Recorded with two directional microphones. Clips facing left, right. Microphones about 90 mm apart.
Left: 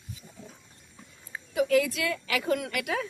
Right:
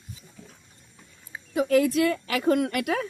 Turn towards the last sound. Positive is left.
turn(degrees=-50)  # may be behind; listen again after turning